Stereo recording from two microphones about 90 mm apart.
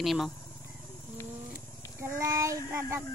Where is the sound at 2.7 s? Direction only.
30° right (ahead or behind).